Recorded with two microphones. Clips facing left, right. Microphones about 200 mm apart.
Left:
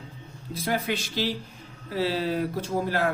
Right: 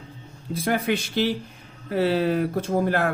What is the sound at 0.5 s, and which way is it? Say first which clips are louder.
Speech: right 4 dB; 55° right (ahead or behind).